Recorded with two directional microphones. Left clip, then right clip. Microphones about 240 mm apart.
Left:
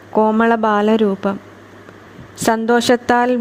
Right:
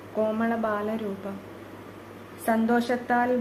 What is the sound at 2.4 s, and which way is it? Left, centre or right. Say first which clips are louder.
Speech: left 11 dB; left.